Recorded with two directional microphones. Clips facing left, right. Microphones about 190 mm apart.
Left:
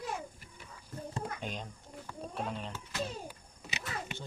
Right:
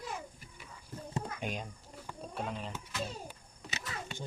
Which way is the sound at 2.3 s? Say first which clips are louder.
Even; centre (ahead or behind).